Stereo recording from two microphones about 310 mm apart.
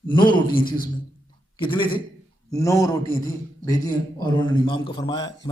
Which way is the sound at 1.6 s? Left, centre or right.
Centre.